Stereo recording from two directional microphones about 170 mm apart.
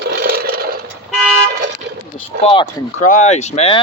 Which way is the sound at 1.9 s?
90° right.